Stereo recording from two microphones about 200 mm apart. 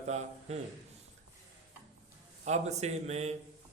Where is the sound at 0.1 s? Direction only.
35° right (ahead or behind).